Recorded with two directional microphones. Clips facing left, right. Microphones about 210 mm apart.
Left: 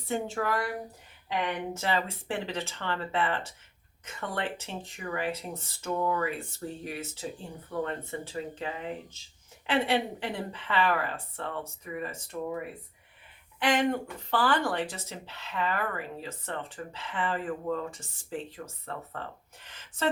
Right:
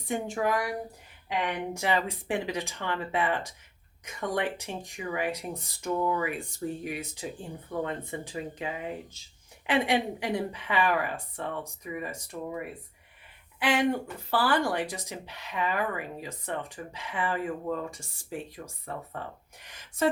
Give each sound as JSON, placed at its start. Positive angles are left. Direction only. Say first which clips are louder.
{"t": 0.0, "sound": "speech", "louder": "right 1 dB", "side_deg": -15}
{"t": 1.7, "sound": "speech", "louder": "right 2 dB", "side_deg": -15}
{"t": 13.6, "sound": "speech", "louder": "even", "side_deg": -10}
{"t": 19.6, "sound": "a sound", "louder": "right 5 dB", "side_deg": -15}